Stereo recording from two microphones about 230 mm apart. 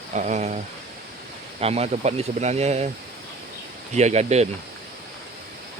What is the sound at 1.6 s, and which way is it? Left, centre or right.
Speech, right.